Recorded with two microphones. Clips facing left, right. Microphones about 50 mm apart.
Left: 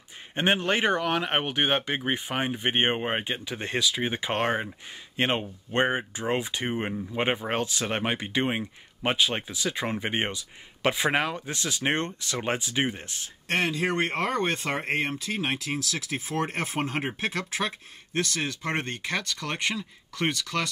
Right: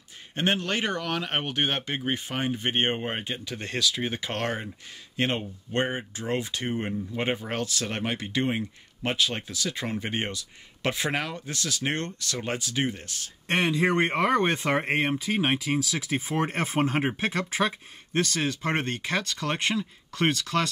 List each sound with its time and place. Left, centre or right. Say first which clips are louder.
0.4 s speech: left 2 dB; left
13.5 s speech: right 2 dB; right; by 20.6 s centre